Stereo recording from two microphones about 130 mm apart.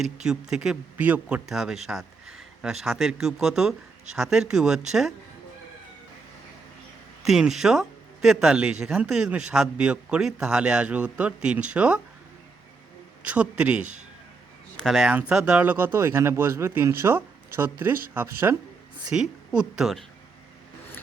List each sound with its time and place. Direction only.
0.0 s speech: 5° right (ahead or behind)
7.2 s speech: 5° right (ahead or behind)
13.2 s speech: 10° right (ahead or behind)
19.1 s speech: 5° right (ahead or behind)